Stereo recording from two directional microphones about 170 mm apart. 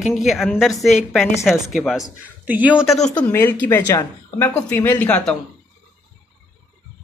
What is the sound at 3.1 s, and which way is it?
Speech, 10° left (ahead or behind).